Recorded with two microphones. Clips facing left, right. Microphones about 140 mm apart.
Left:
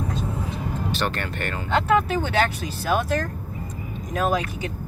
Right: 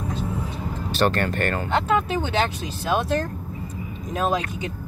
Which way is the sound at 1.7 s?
15° right (ahead or behind).